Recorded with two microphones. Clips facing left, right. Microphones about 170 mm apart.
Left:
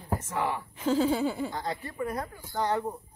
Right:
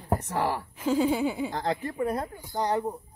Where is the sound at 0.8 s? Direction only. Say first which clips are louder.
Right 1 dB; 10° right (ahead or behind).